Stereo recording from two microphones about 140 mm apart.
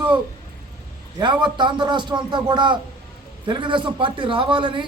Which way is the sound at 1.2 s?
35° right (ahead or behind).